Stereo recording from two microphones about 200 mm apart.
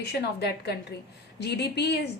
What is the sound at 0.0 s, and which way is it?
A woman's voice, 55° left (ahead or behind).